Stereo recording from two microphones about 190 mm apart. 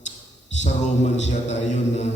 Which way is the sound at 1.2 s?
40° left (ahead or behind).